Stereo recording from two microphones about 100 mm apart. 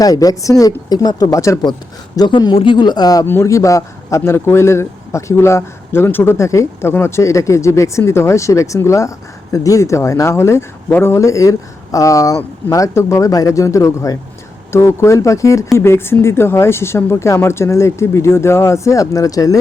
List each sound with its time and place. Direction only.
0.0 s speech: 40° left (ahead or behind)
2.1 s speech: 45° left (ahead or behind)
3.2 s a man's voice: 25° left (ahead or behind)